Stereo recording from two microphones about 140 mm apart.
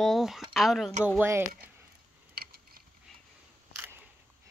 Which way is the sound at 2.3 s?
90° right.